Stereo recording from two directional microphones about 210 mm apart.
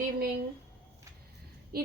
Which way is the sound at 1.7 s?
45° right (ahead or behind).